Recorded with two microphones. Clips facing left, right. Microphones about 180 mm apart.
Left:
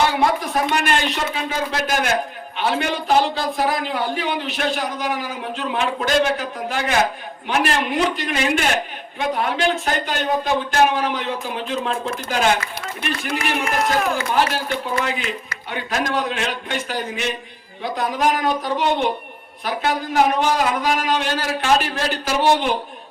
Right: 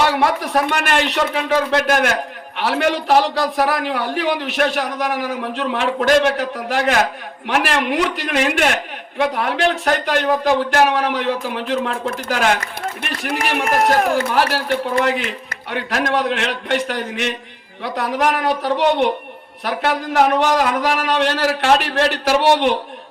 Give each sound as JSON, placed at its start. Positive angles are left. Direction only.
{"t": 0.3, "sound": "a man's voice", "side_deg": -70}
{"t": 20.4, "sound": "a man's voice", "side_deg": -65}